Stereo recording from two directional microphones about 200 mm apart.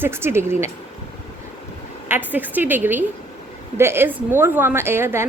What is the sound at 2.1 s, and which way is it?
A woman's voice, 10° right (ahead or behind).